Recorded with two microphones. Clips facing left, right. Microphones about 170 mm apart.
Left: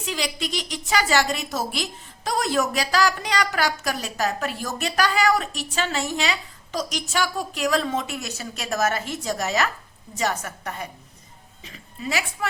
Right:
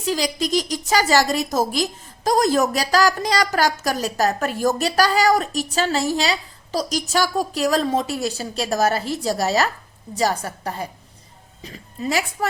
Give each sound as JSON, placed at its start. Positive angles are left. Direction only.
{"t": 0.0, "sound": "a woman's voice", "side_deg": -40}